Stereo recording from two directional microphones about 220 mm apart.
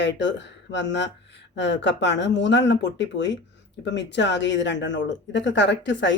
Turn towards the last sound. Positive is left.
turn(degrees=55)  # may be behind; listen again after turning